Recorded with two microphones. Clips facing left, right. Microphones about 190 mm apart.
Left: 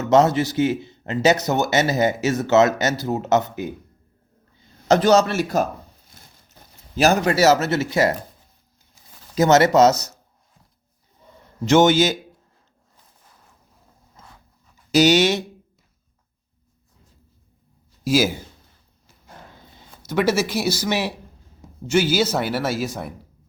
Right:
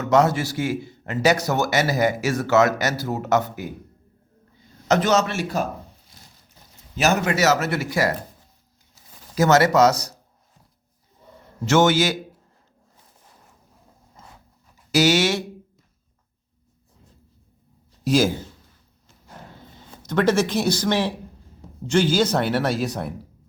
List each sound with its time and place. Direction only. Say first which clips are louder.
0.0 s a man's voice: left 2 dB; 25° left (ahead or behind)
4.9 s a man's voice: left 4 dB; 35° left (ahead or behind)
7.0 s a man's voice: left 3 dB; 35° left (ahead or behind)
9.3 s a man's voice: left 2 dB; 20° left (ahead or behind)
11.6 s a man's voice: left 3 dB; 20° left (ahead or behind)
14.9 s a man's voice: left 3 dB; 20° left (ahead or behind)
18.0 s speech: even; 5° left (ahead or behind)
20.1 s speech: right 1 dB; 5° left (ahead or behind)